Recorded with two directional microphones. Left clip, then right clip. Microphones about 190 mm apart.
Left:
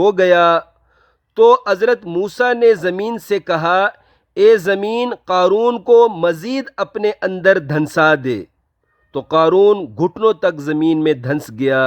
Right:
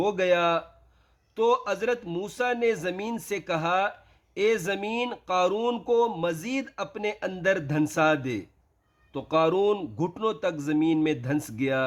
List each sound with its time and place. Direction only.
0.0 s speech: 45° left (ahead or behind)